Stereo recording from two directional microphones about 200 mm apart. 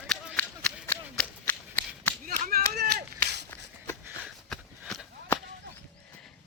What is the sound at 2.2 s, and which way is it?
Clapping, 45° right (ahead or behind).